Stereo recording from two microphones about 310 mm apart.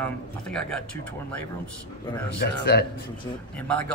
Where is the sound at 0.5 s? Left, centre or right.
Centre.